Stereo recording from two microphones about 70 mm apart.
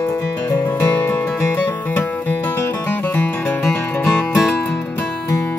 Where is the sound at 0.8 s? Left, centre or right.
Left.